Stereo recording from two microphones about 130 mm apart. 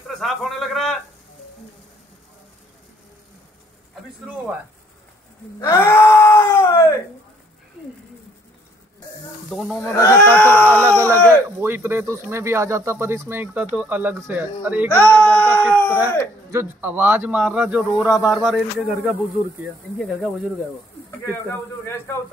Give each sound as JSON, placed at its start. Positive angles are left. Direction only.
{"t": 0.2, "sound": "a man's voice", "side_deg": 0}
{"t": 5.6, "sound": "wail", "side_deg": 20}
{"t": 9.8, "sound": "speech", "side_deg": 20}
{"t": 10.7, "sound": "speech", "side_deg": -20}
{"t": 14.9, "sound": "speech", "side_deg": 10}
{"t": 16.4, "sound": "speech", "side_deg": -20}
{"t": 21.5, "sound": "speech", "side_deg": 20}